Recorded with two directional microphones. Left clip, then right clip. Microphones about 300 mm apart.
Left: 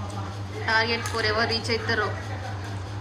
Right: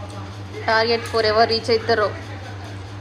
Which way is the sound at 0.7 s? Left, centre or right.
Centre.